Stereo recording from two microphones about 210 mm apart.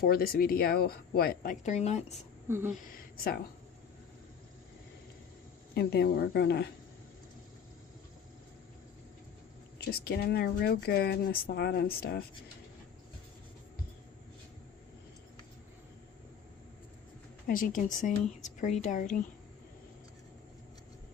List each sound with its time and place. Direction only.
0.0 s speech: 45° left (ahead or behind)
2.5 s speech: 10° right (ahead or behind)
2.9 s speech: 45° left (ahead or behind)
5.7 s speech: 50° left (ahead or behind)
9.9 s speech: 45° left (ahead or behind)
17.4 s speech: 40° left (ahead or behind)